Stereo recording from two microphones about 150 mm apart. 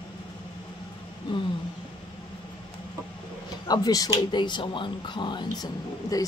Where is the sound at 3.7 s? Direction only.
25° left (ahead or behind).